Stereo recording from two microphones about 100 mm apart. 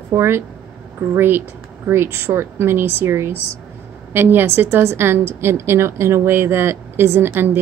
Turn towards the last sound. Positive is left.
turn(degrees=-20)  # may be behind; listen again after turning